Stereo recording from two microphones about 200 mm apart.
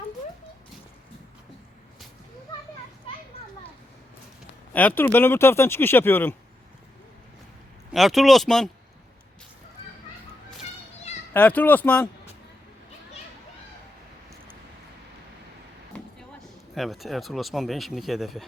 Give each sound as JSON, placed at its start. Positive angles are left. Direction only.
{"t": 4.7, "sound": "speech", "side_deg": 10}
{"t": 7.9, "sound": "speech", "side_deg": 0}
{"t": 11.3, "sound": "speech", "side_deg": 10}
{"t": 16.4, "sound": "speech", "side_deg": 0}